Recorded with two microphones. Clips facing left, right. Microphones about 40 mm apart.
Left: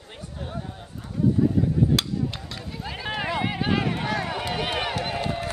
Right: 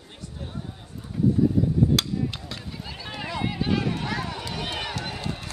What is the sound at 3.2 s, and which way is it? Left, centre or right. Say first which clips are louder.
Run: left 2 dB; left.